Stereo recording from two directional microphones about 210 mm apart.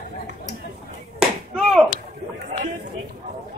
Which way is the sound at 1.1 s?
Centre (ahead or behind).